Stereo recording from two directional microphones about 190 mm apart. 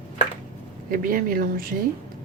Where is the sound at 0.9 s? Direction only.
50° right (ahead or behind).